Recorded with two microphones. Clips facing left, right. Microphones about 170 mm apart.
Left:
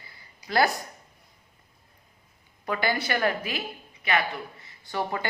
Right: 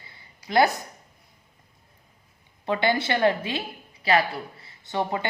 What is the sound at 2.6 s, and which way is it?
Speech, 25° right (ahead or behind).